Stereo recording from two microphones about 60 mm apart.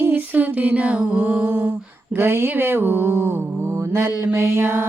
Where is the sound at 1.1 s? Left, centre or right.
Right.